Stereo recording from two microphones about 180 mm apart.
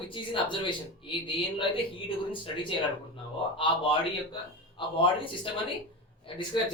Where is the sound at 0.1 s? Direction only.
25° left (ahead or behind).